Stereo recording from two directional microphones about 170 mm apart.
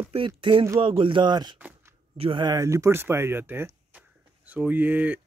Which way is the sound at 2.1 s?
30° right (ahead or behind).